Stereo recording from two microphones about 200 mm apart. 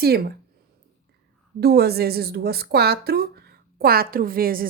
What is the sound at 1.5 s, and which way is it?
A woman's voice, 55° right (ahead or behind).